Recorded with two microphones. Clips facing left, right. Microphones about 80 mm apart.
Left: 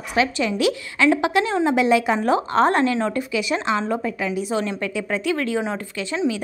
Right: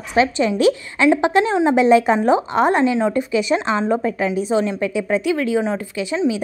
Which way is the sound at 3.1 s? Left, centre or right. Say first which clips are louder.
Right 5 dB; right.